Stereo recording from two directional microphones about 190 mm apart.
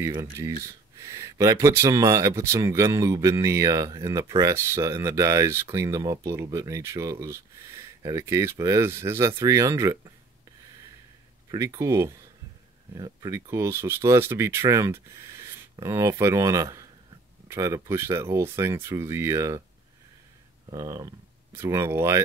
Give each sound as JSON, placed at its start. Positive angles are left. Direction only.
{"t": 0.0, "sound": "speech", "side_deg": -15}
{"t": 11.5, "sound": "speech", "side_deg": -15}
{"t": 20.7, "sound": "speech", "side_deg": -20}